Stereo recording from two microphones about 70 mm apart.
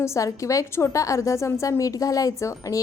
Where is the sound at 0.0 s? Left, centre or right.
Left.